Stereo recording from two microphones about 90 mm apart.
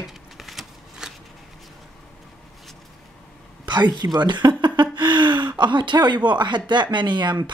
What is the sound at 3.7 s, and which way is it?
Speech, 55° right (ahead or behind).